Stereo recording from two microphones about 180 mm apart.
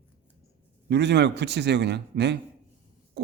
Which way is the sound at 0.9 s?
70° right (ahead or behind).